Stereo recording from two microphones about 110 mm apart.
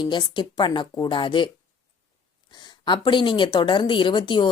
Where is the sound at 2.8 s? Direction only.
45° left (ahead or behind).